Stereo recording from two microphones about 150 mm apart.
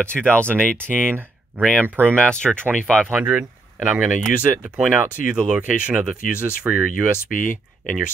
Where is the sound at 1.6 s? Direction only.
10° left (ahead or behind).